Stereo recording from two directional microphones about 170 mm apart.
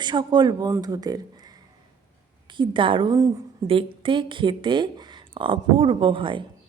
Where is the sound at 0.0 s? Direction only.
25° right (ahead or behind).